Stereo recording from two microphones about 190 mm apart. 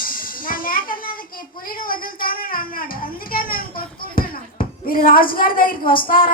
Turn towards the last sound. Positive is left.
turn(degrees=50)  # may be behind; listen again after turning